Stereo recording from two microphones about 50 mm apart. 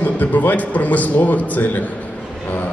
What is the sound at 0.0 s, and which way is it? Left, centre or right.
A man's voice, left.